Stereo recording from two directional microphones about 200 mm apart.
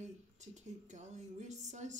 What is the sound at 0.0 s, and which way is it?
Speech, 35° right (ahead or behind).